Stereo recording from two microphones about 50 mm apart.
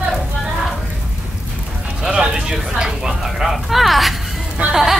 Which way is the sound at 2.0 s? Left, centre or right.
Centre.